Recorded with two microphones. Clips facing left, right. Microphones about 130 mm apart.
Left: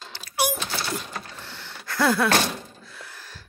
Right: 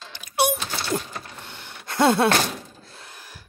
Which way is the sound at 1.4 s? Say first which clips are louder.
Even; 20° right (ahead or behind).